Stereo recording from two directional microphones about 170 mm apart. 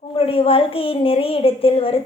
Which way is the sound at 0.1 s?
30° left (ahead or behind).